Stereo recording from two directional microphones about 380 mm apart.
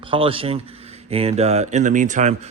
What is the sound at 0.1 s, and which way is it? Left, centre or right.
Speech, centre.